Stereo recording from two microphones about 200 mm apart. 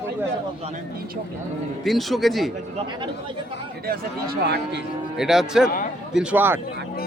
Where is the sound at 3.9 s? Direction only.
55° right (ahead or behind).